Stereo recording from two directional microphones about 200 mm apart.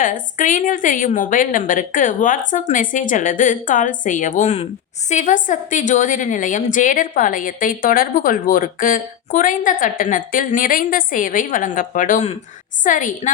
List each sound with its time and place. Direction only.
0.0 s a woman's voice: 40° left (ahead or behind)